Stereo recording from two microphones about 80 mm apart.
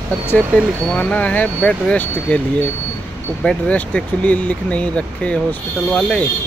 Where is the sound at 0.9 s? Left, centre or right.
Centre.